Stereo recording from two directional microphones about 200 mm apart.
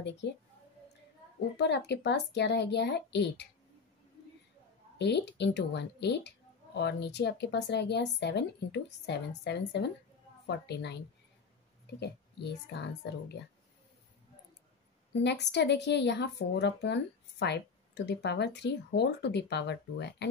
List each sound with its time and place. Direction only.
1.6 s speech: 60° left (ahead or behind)
4.9 s speech: 60° left (ahead or behind)
12.0 s speech: 55° left (ahead or behind)
15.2 s speech: 60° left (ahead or behind)